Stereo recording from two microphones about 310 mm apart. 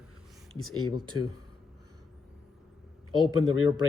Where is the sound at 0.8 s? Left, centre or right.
Left.